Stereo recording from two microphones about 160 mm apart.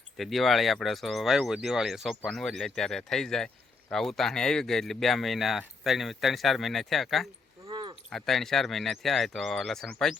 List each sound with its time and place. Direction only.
0.2 s speech: centre (ahead or behind)
7.7 s a sound: 30° right (ahead or behind)
8.1 s speech: centre (ahead or behind)